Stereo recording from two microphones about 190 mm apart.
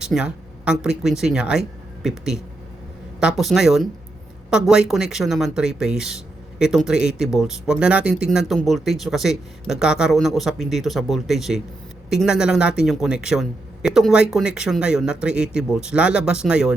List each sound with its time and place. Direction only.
0.0 s a man's voice: 5° right (ahead or behind)